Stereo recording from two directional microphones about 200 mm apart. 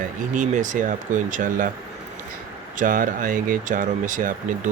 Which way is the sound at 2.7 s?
40° right (ahead or behind).